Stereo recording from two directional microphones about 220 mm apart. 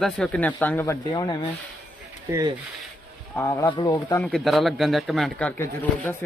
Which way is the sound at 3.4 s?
10° left (ahead or behind).